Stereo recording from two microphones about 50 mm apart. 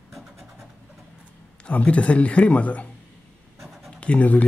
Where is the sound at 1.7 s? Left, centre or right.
Left.